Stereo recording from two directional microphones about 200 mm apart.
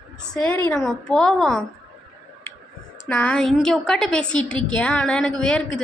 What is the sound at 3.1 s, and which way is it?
A woman's voice, 5° left (ahead or behind).